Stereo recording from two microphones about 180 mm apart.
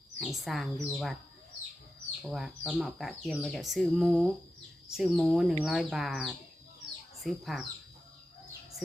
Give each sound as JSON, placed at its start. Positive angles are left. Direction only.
{"t": 0.2, "sound": "speech", "side_deg": 0}
{"t": 2.2, "sound": "speech", "side_deg": 0}